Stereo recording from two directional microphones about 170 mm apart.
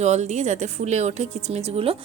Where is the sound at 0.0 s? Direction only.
40° right (ahead or behind).